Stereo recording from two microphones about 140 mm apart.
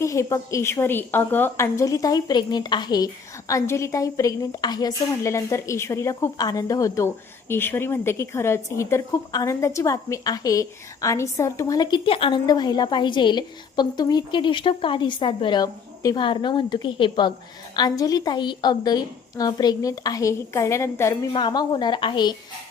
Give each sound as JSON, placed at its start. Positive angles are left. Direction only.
{"t": 0.0, "sound": "a woman's voice", "side_deg": 20}
{"t": 12.5, "sound": "a woman's voice", "side_deg": 30}
{"t": 21.3, "sound": "a woman's voice", "side_deg": 30}